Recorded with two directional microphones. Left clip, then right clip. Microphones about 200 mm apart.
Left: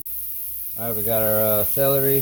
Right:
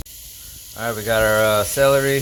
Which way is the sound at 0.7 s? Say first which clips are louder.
Right 5 dB; 30° right (ahead or behind).